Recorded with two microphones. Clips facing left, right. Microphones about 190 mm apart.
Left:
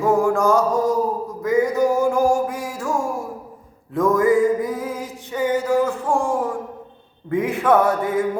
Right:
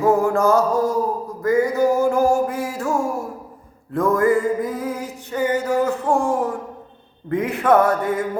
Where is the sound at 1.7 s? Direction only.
15° left (ahead or behind).